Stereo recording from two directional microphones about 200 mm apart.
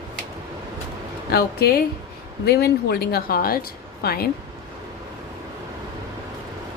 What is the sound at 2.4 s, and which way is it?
Speech, 50° left (ahead or behind).